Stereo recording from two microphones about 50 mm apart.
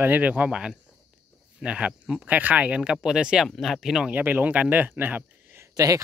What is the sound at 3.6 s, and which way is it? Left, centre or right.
Speech, centre.